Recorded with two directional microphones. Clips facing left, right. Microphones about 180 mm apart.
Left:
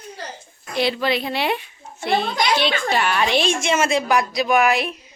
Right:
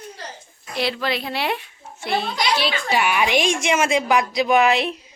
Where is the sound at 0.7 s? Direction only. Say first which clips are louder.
Left 3 dB; centre (ahead or behind).